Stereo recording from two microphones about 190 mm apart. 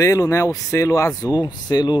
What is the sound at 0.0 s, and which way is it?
Speech, 15° left (ahead or behind).